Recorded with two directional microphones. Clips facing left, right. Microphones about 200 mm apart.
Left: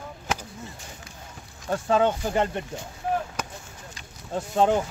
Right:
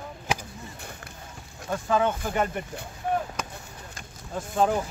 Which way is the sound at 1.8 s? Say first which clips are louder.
Left 2 dB; 30° left (ahead or behind).